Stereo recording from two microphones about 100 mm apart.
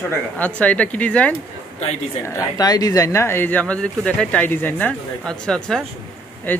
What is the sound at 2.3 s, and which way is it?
Speech, 40° left (ahead or behind).